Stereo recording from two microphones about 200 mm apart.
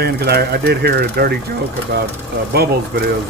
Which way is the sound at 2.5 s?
50° right (ahead or behind).